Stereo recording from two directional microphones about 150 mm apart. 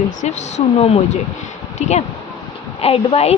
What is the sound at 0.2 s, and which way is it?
A woman's voice, 50° left (ahead or behind).